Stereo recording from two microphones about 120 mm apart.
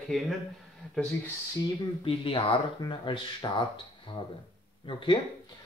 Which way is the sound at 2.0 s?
50° left (ahead or behind).